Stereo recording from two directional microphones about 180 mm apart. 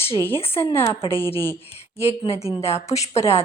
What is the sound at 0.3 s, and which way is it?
Speech, 15° left (ahead or behind).